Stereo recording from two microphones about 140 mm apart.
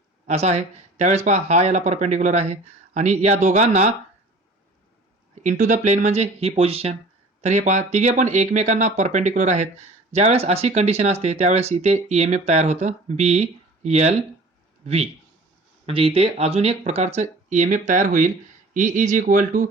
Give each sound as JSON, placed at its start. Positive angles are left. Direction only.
{"t": 0.3, "sound": "speech", "side_deg": -50}
{"t": 5.3, "sound": "speech", "side_deg": -60}
{"t": 7.4, "sound": "speech", "side_deg": -60}